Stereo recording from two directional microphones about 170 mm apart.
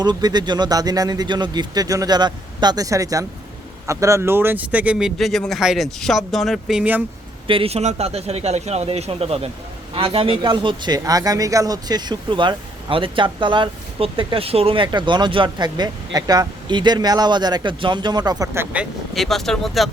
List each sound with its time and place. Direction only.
0.0 s speech: 25° right (ahead or behind); by 7.0 s 5° right (ahead or behind)
7.4 s a man's voice: 30° right (ahead or behind); by 19.9 s centre (ahead or behind)